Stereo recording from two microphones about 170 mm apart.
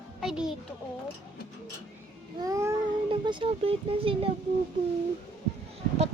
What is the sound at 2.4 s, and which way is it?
Speech, 20° right (ahead or behind).